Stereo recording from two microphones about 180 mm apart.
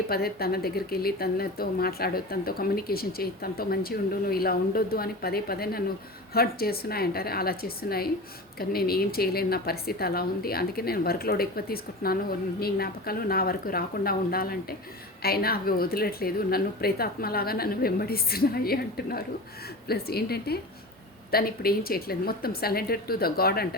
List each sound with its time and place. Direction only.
0.1 s a woman's voice: 60° left (ahead or behind)